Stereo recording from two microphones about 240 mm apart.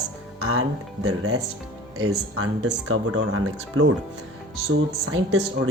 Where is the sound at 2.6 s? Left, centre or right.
Right.